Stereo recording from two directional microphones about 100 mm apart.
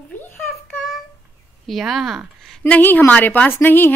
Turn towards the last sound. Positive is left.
turn(degrees=20)  # may be behind; listen again after turning